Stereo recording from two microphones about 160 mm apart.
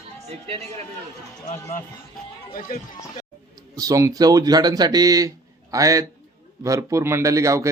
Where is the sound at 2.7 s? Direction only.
60° left (ahead or behind).